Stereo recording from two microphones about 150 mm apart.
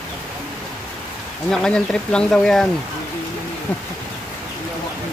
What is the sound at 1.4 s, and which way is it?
Speech, 5° left (ahead or behind).